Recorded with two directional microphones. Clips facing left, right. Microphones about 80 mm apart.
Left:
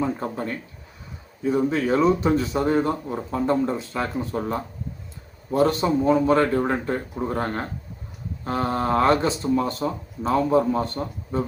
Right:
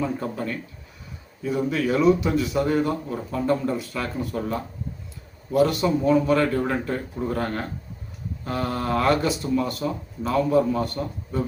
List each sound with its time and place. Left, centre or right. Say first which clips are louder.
0.0 s speech: left 1 dB; left